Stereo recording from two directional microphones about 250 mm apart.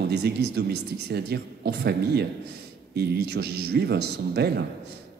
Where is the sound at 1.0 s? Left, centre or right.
Right.